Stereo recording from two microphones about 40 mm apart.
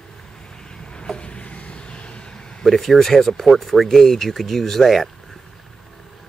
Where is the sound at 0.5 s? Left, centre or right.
Centre.